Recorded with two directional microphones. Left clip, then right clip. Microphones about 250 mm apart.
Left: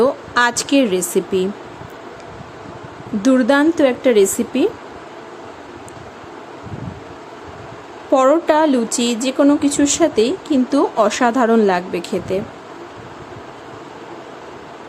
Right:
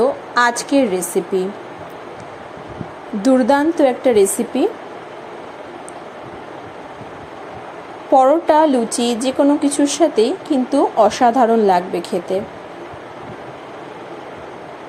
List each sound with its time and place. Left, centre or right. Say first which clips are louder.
0.0 s a sound: even; centre
0.9 s speech: left 1 dB; centre
3.3 s speech: even; centre
8.1 s speech: right 1 dB; centre